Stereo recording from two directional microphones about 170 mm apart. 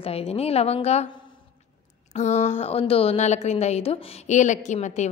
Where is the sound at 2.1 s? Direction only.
40° left (ahead or behind).